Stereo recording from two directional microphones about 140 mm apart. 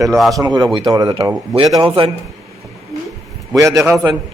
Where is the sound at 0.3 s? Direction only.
30° right (ahead or behind).